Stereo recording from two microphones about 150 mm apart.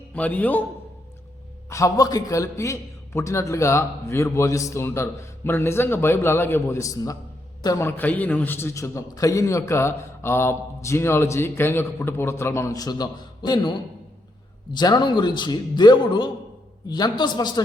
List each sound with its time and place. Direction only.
0.1 s a man's voice: 10° left (ahead or behind)
1.7 s a man's voice: 20° left (ahead or behind)